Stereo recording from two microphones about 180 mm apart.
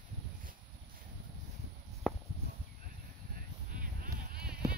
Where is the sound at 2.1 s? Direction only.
5° left (ahead or behind).